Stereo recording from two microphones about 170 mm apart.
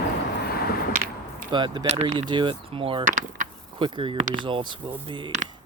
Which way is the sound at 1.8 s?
40° right (ahead or behind).